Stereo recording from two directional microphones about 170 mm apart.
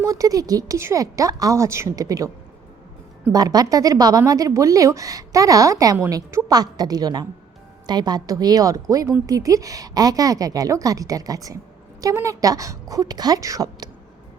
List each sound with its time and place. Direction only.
0.0 s a woman's voice: 20° right (ahead or behind)
3.3 s a woman's voice: 20° right (ahead or behind)